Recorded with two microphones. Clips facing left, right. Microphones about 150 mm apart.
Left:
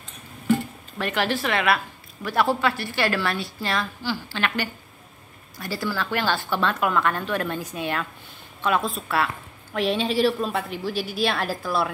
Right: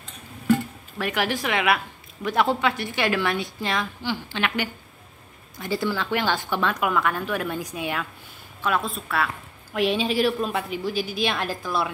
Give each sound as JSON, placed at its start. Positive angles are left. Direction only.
{"t": 0.9, "sound": "a woman's voice", "side_deg": -10}
{"t": 8.6, "sound": "a woman's voice", "side_deg": 0}